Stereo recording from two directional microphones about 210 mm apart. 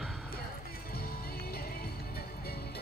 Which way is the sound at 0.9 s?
45° left (ahead or behind).